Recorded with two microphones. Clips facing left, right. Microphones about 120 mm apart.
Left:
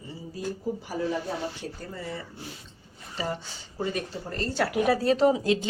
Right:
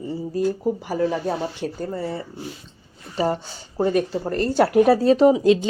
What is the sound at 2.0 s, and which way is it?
Speech, 35° right (ahead or behind).